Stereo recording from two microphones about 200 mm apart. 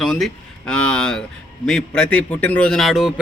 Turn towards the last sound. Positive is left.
turn(degrees=0)  # may be behind; listen again after turning